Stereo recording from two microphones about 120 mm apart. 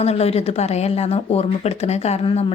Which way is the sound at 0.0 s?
60° left (ahead or behind).